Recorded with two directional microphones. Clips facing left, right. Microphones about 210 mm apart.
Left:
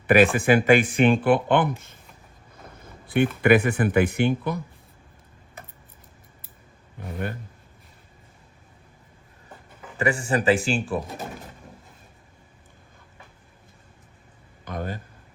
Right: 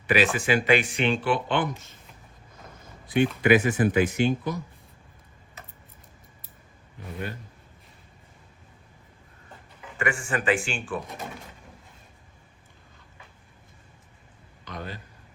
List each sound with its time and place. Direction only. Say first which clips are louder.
0.1 s speech: left 6 dB; 55° left (ahead or behind)
3.1 s speech: left 2 dB; 60° left (ahead or behind)
10.0 s speech: left 5 dB; 35° left (ahead or behind)
14.6 s speech: left 6 dB; 50° left (ahead or behind)